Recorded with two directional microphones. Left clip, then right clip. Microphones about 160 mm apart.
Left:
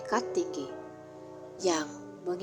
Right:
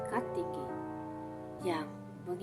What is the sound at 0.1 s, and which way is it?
Music, 30° left (ahead or behind).